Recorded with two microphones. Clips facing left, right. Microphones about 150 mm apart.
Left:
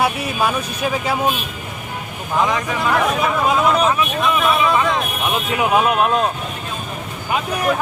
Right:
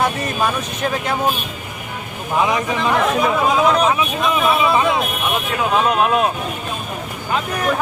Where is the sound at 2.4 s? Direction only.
15° right (ahead or behind).